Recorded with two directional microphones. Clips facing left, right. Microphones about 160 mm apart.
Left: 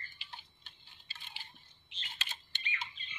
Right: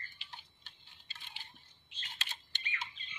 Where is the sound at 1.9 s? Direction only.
20° left (ahead or behind).